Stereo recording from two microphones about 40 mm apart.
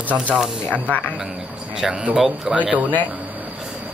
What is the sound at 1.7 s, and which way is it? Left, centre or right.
Speech, centre.